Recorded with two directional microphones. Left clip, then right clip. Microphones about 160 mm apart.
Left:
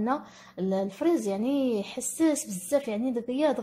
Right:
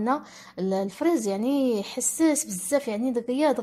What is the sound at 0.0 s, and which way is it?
Speech, 25° right (ahead or behind).